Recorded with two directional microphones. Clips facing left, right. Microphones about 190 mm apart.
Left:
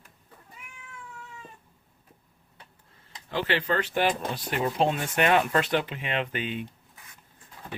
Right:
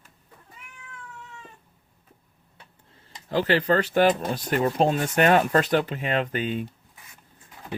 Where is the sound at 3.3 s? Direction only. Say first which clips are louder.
Right 6 dB; 40° right (ahead or behind).